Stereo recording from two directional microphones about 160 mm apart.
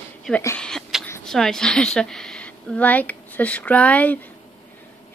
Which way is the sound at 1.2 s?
5° left (ahead or behind).